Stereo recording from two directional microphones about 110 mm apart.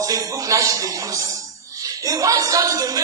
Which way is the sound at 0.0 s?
30° right (ahead or behind).